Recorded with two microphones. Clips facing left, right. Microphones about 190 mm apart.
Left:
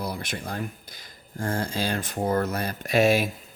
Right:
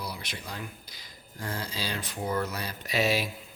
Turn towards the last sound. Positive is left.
turn(degrees=50)  # may be behind; listen again after turning